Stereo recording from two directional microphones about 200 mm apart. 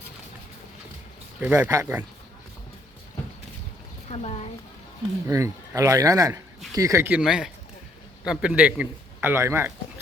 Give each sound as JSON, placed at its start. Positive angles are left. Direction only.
{"t": 1.4, "sound": "a man's voice", "side_deg": -10}
{"t": 4.1, "sound": "a woman's voice", "side_deg": 35}
{"t": 5.3, "sound": "a man's voice", "side_deg": -15}